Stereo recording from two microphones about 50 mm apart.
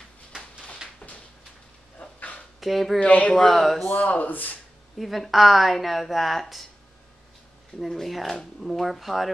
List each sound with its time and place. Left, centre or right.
2.0 s dog: left
2.6 s a woman's voice: centre
3.0 s speech: left
3.3 s a woman's voice: centre
3.9 s speech: left
4.9 s a woman's voice: centre
7.8 s a woman's voice: centre